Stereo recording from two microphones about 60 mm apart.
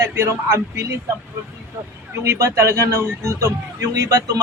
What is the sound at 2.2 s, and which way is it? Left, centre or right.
Speech, right.